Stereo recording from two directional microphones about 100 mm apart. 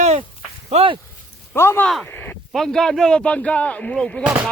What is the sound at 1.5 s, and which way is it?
Speech, 25° left (ahead or behind).